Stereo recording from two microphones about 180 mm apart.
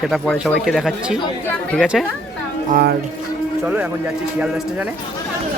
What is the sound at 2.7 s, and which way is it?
Speech, 60° right (ahead or behind).